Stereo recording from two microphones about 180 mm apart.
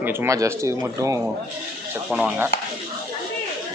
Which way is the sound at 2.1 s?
5° right (ahead or behind).